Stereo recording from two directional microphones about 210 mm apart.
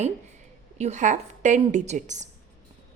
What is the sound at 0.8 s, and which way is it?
A woman's voice, 35° right (ahead or behind).